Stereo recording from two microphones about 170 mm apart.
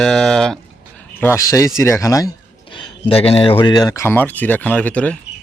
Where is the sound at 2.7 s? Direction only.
35° left (ahead or behind).